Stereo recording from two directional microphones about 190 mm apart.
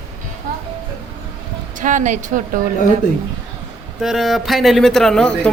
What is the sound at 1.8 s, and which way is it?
Speech, 40° right (ahead or behind).